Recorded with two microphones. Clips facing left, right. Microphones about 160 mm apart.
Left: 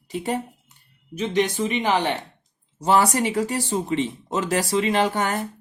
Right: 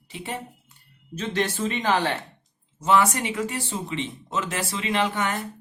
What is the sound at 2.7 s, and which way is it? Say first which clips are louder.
Speech: left 2 dB; 35° left (ahead or behind).